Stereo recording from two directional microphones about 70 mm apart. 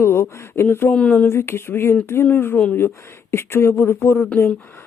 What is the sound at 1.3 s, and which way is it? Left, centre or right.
Speech, left.